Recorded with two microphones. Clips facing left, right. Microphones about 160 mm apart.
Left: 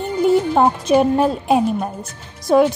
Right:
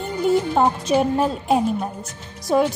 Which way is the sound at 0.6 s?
60° left (ahead or behind).